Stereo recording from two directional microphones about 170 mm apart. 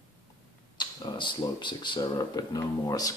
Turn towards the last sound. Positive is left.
turn(degrees=20)  # may be behind; listen again after turning